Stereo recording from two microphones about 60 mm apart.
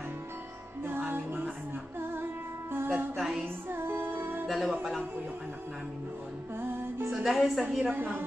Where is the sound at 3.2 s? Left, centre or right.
Centre.